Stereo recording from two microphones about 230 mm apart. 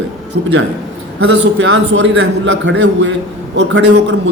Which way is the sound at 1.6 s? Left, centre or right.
Right.